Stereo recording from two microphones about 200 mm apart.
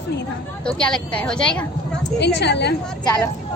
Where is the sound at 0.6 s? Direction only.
5° left (ahead or behind).